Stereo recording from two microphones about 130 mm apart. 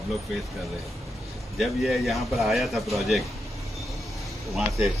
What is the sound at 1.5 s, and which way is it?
A man's voice, centre (ahead or behind).